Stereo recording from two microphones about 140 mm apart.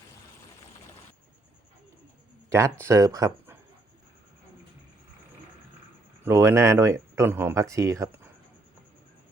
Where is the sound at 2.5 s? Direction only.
20° right (ahead or behind).